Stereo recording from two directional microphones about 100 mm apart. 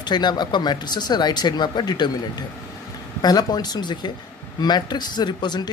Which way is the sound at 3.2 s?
40° left (ahead or behind).